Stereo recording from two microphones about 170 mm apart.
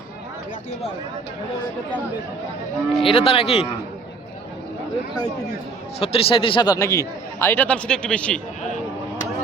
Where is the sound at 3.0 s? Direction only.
35° left (ahead or behind).